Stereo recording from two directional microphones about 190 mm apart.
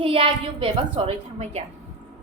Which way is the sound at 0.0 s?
30° right (ahead or behind).